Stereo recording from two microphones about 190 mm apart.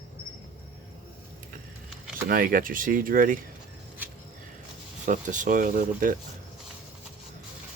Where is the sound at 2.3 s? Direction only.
50° right (ahead or behind).